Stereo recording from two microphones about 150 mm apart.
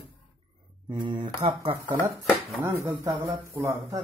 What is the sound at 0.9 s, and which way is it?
Speech, 30° right (ahead or behind).